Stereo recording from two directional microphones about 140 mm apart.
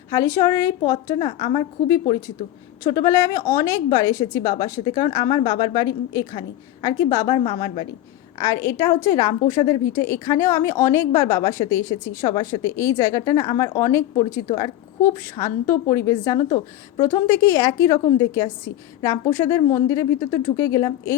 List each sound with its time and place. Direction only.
0.1 s a woman's voice: 25° left (ahead or behind)
8.4 s a woman's voice: 20° left (ahead or behind)